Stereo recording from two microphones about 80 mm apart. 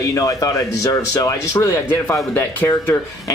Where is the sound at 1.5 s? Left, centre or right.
Left.